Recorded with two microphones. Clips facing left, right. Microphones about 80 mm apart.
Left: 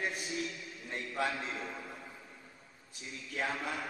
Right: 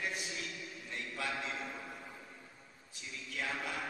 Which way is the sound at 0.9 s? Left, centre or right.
Left.